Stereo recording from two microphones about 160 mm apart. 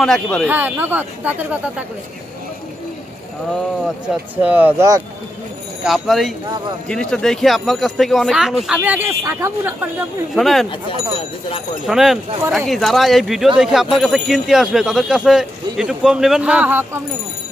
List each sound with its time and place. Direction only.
0.0 s speech: 5° left (ahead or behind)
0.5 s speech: 10° right (ahead or behind)
3.8 s speech: 5° right (ahead or behind)
5.9 s speech: centre (ahead or behind); by 9.8 s 15° right (ahead or behind)
10.3 s speech: centre (ahead or behind)
11.9 s speech: centre (ahead or behind)